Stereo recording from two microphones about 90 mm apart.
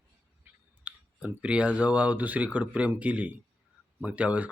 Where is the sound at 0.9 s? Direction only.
15° right (ahead or behind).